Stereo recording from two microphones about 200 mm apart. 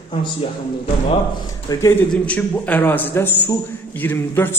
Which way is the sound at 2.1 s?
5° left (ahead or behind).